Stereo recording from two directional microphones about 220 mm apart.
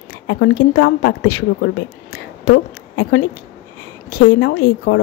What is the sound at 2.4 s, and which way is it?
Speech, 65° left (ahead or behind).